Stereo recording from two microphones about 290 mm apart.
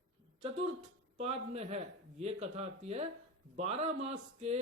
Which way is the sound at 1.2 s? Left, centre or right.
Right.